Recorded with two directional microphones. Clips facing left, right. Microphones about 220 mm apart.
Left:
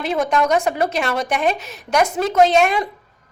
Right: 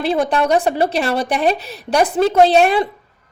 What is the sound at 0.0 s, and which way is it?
A woman's voice, 30° right (ahead or behind).